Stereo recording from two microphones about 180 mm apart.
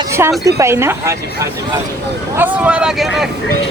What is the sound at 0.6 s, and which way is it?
Speech, 15° right (ahead or behind).